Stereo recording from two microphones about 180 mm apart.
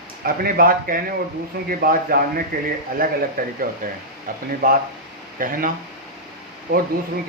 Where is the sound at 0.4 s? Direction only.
55° right (ahead or behind).